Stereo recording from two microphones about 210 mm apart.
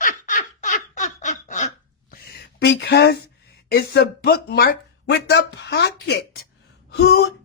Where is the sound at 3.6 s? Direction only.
50° left (ahead or behind).